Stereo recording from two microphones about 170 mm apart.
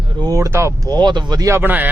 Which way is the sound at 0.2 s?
20° right (ahead or behind).